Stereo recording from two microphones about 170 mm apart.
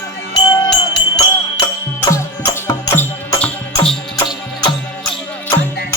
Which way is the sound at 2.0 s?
15° left (ahead or behind).